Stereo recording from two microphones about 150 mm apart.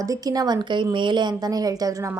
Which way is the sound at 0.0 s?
25° right (ahead or behind).